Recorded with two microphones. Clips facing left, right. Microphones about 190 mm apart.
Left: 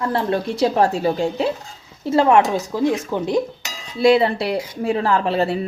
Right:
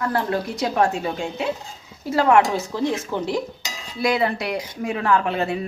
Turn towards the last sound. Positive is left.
turn(degrees=35)  # may be behind; listen again after turning